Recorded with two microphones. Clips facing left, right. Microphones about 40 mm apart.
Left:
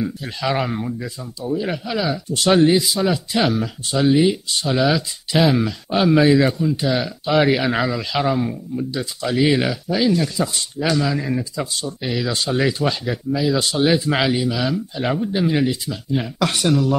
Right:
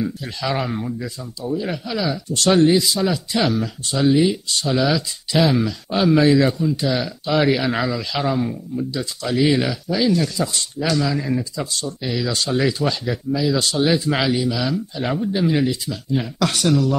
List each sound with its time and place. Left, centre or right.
0.0 s speech: centre